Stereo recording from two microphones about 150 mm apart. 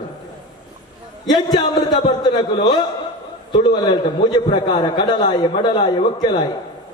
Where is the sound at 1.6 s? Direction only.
25° left (ahead or behind).